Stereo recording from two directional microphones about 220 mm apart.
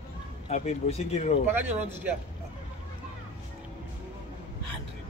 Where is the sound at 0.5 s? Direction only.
30° left (ahead or behind).